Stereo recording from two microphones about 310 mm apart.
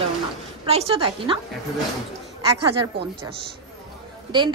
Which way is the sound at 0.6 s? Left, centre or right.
Centre.